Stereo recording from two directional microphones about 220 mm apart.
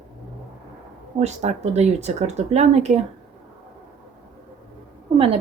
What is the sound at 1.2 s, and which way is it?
A woman's voice, 30° right (ahead or behind).